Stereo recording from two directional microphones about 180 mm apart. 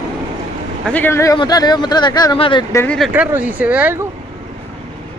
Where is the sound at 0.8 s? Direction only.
10° left (ahead or behind); by 2.6 s 30° left (ahead or behind).